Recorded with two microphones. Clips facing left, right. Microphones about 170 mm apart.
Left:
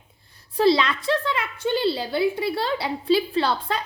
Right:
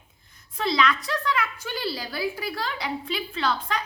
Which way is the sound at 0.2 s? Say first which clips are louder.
Left 10 dB; 35° left (ahead or behind).